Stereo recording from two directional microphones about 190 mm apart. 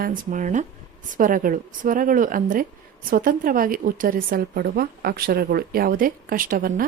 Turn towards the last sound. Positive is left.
turn(degrees=-50)  # may be behind; listen again after turning